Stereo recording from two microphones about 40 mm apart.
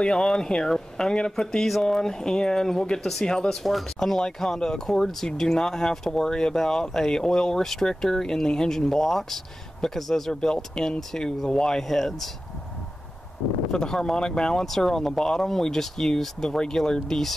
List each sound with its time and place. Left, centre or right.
0.0 s speech: left; by 12.3 s centre
13.7 s speech: centre
14.6 s speech: centre